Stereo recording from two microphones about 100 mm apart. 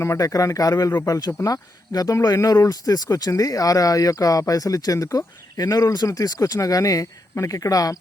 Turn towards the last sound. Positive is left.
turn(degrees=35)  # may be behind; listen again after turning